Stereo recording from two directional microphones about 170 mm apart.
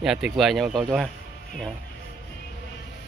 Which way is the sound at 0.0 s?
5° right (ahead or behind).